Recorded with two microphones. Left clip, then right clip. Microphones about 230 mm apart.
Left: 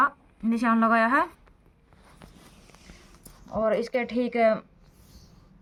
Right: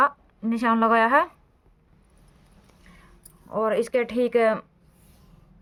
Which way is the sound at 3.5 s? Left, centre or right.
Right.